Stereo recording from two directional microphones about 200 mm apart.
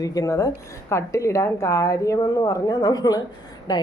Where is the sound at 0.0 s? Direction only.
15° left (ahead or behind).